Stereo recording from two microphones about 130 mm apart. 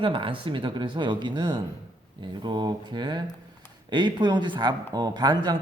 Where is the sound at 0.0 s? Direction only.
40° right (ahead or behind).